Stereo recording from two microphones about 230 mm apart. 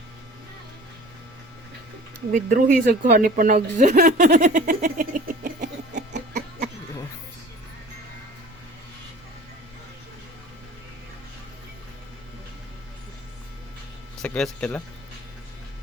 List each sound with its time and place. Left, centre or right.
2.3 s a woman's voice: right
6.0 s a sound: right
14.2 s speech: centre